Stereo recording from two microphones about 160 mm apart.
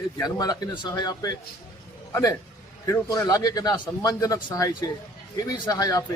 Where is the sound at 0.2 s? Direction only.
25° left (ahead or behind).